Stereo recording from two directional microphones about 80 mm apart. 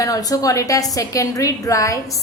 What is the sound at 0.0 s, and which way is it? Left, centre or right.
A woman's voice, left.